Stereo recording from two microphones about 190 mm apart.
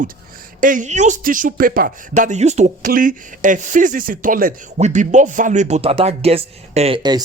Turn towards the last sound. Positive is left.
turn(degrees=-25)  # may be behind; listen again after turning